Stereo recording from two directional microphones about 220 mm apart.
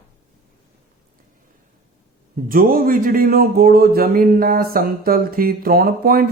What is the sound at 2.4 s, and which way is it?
Speech, 40° right (ahead or behind).